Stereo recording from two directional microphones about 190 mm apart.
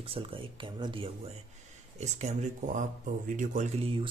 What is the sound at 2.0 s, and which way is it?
Speech, 35° right (ahead or behind).